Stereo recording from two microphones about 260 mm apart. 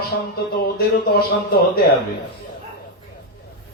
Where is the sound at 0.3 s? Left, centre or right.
Left.